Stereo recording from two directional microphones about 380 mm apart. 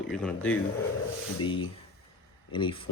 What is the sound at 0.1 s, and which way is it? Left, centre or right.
Speech, centre.